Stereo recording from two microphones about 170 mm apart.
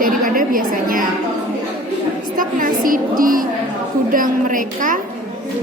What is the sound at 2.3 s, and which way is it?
A woman's voice, 55° right (ahead or behind).